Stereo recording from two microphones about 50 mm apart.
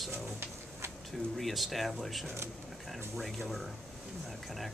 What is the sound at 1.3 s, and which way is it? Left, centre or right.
Speech, centre.